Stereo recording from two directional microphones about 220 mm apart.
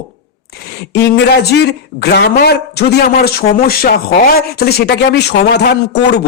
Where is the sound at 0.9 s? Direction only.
50° left (ahead or behind).